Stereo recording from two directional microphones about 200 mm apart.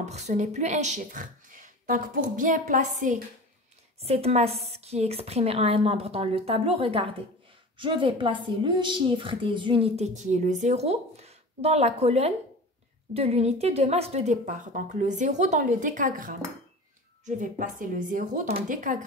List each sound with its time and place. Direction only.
0.0 s a woman's voice: 35° right (ahead or behind)
17.4 s a woman's voice: 40° right (ahead or behind)